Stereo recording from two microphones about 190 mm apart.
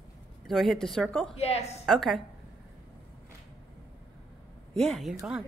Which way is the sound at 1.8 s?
Centre (ahead or behind).